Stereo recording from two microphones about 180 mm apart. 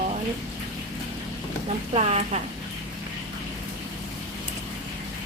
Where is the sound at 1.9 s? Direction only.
40° right (ahead or behind).